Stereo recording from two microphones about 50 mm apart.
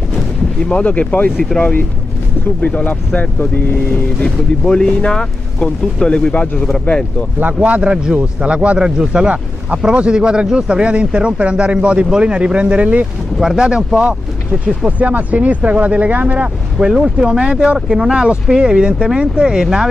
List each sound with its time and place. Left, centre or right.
0.7 s speech: left
1.3 s speech: centre
2.6 s speech: left
4.2 s speech: centre; by 7.0 s left
7.3 s speech: right
7.8 s speech: centre
13.4 s speech: centre
14.9 s speech: right
16.3 s speech: centre
17.7 s speech: centre